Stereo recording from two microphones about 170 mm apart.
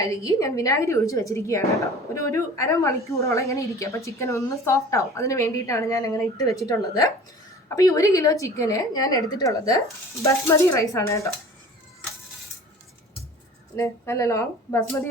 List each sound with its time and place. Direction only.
0.0 s a woman's voice: 20° left (ahead or behind)
13.7 s a woman's voice: 15° left (ahead or behind)